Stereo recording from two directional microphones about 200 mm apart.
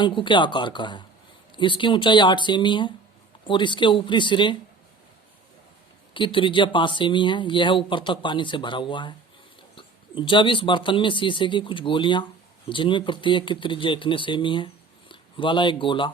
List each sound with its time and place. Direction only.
0.0 s speech: 25° left (ahead or behind)
6.1 s speech: 25° left (ahead or behind)